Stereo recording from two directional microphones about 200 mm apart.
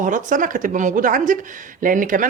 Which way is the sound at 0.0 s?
40° right (ahead or behind).